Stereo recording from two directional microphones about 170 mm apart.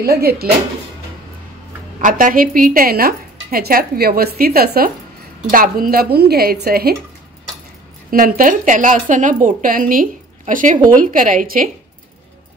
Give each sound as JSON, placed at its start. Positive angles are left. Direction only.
{"t": 0.0, "sound": "speech", "side_deg": -65}
{"t": 2.0, "sound": "a woman's voice", "side_deg": -50}
{"t": 8.1, "sound": "a woman's voice", "side_deg": -55}